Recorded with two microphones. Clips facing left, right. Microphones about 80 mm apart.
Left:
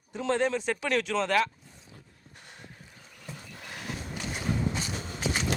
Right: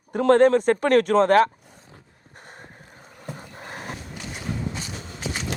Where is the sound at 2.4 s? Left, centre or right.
Right.